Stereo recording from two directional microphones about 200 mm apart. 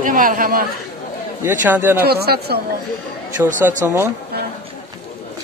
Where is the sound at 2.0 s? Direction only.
50° right (ahead or behind).